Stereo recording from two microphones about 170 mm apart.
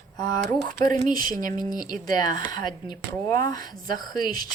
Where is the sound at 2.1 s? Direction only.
20° left (ahead or behind).